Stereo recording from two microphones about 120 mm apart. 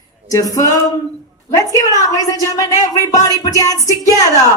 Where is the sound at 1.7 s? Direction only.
30° left (ahead or behind).